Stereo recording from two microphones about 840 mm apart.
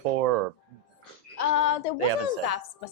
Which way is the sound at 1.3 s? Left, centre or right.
Left.